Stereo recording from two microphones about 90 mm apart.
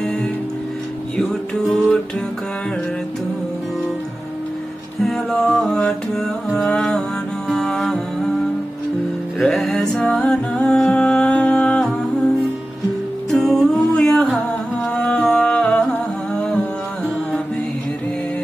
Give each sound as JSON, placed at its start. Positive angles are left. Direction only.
{"t": 0.0, "sound": "music", "side_deg": 5}
{"t": 5.0, "sound": "music", "side_deg": 5}
{"t": 9.4, "sound": "music", "side_deg": 5}
{"t": 13.3, "sound": "music", "side_deg": 5}